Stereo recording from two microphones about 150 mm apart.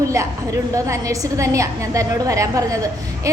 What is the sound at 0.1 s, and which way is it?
A woman's voice, 20° right (ahead or behind).